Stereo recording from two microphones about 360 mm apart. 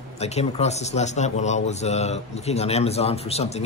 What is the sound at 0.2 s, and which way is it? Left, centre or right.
A man's voice, centre.